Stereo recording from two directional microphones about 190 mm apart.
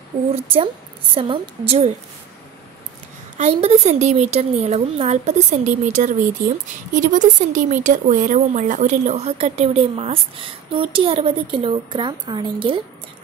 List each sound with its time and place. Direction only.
0.3 s a woman's voice: 30° right (ahead or behind)
3.3 s speech: 35° right (ahead or behind)